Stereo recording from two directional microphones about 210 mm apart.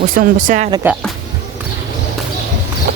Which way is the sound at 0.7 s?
10° right (ahead or behind).